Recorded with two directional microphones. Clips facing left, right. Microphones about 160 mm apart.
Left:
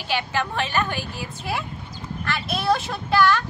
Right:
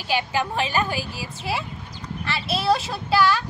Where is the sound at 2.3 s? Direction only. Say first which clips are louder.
Right 2 dB; 30° right (ahead or behind).